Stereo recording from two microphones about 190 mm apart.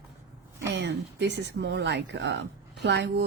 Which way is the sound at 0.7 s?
65° right (ahead or behind).